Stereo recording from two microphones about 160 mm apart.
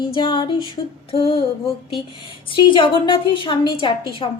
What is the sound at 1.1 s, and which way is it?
Speech, 35° left (ahead or behind).